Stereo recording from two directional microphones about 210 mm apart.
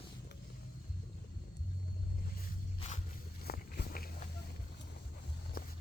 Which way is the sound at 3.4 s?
45° left (ahead or behind).